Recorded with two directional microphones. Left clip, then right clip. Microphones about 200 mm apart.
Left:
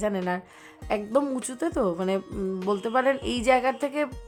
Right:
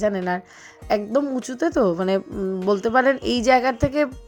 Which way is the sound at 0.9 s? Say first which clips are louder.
Right 4 dB; 20° right (ahead or behind).